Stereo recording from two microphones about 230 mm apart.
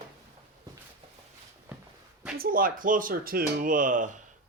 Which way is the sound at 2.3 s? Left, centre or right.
Right.